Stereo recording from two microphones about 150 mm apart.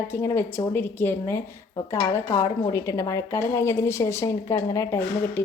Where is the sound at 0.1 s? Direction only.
15° left (ahead or behind).